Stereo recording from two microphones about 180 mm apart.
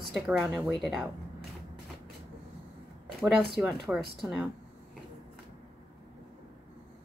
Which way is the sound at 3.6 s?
Centre (ahead or behind).